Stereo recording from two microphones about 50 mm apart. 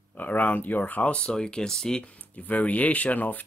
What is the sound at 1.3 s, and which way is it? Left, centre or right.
Speech, centre.